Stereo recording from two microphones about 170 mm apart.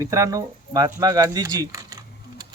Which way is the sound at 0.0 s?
20° right (ahead or behind).